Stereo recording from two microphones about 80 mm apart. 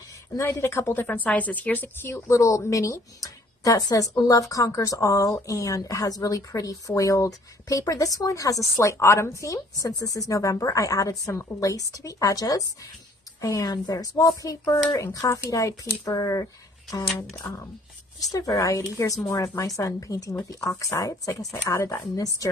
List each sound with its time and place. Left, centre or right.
0.4 s a woman's voice: left
1.0 s a woman's voice: centre; by 13.7 s left
13.7 s speech: left
14.0 s a woman's voice: left
15.1 s a woman's voice: left
18.3 s a woman's voice: left